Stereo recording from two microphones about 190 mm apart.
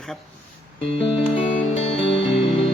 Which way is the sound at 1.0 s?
30° left (ahead or behind).